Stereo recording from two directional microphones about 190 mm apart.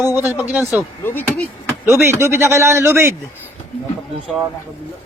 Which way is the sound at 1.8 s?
15° right (ahead or behind).